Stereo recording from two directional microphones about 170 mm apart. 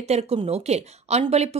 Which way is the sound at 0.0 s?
40° right (ahead or behind).